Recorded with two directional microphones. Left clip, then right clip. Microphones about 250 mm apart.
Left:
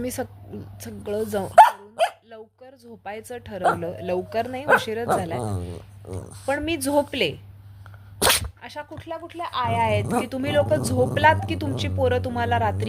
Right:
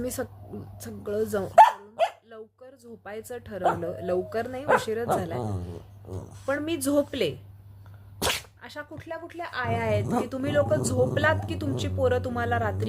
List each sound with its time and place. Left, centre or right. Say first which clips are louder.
0.0 s a woman's voice: left 2 dB; centre
1.5 s dog: left 3 dB; centre
2.3 s a woman's voice: left 2 dB; centre
5.4 s speech: left 3 dB; centre
6.4 s a woman's voice: left 3 dB; centre
8.2 s sneeze: left 8 dB; left
8.6 s a woman's voice: left 4 dB; centre